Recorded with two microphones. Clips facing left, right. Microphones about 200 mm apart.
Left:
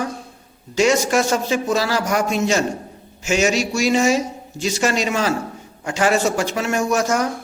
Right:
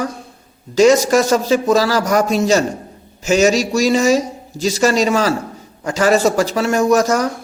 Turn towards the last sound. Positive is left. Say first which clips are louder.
# right 5 dB
turn(degrees=-40)  # may be behind; listen again after turning